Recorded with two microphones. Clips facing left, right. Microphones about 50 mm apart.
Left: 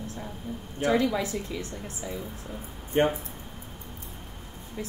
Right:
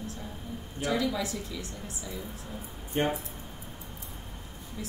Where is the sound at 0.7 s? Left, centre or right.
Left.